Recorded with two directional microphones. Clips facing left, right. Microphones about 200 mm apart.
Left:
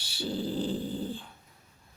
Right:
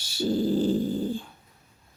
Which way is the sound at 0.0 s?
45° right (ahead or behind).